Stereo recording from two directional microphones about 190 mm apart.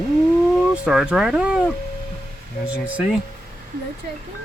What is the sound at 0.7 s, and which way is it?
Speech, 5° right (ahead or behind).